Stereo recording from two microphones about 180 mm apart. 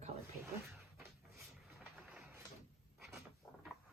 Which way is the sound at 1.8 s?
5° right (ahead or behind).